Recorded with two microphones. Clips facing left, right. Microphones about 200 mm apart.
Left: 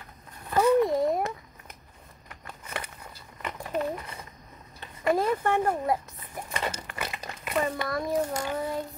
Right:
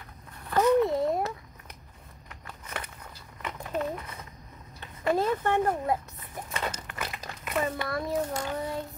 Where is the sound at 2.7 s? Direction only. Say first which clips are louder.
Left 1 dB; 10° left (ahead or behind).